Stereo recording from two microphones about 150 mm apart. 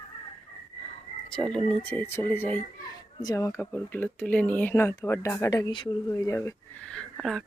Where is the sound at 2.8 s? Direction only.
25° left (ahead or behind).